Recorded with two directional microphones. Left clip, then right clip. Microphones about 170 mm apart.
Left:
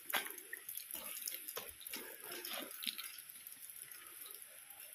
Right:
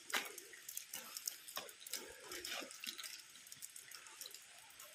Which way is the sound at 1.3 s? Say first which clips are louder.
Right 2 dB; 40° right (ahead or behind).